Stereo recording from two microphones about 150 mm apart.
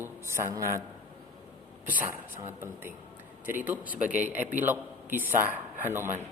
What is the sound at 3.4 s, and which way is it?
A man's voice, 10° right (ahead or behind).